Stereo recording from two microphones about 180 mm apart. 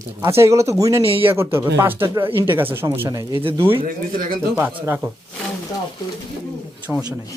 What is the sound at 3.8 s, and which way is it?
Speech, 50° right (ahead or behind).